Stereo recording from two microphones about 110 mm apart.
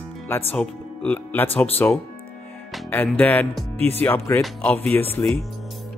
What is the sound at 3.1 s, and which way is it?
Speech, 15° left (ahead or behind).